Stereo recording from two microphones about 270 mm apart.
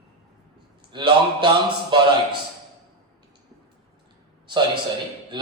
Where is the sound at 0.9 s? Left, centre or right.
Centre.